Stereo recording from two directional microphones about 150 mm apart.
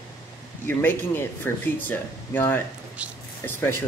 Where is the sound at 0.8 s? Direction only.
15° left (ahead or behind).